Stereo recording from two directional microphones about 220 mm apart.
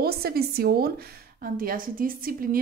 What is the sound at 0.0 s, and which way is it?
A woman's voice, 45° right (ahead or behind).